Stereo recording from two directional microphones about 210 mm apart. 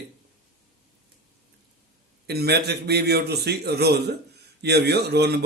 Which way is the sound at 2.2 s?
50° right (ahead or behind).